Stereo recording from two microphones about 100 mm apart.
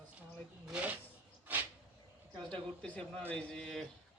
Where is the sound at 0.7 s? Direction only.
15° right (ahead or behind).